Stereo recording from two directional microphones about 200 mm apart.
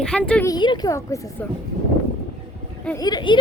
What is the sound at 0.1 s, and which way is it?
Speech, 5° left (ahead or behind).